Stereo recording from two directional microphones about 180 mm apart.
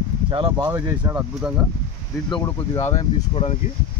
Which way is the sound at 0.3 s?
30° right (ahead or behind).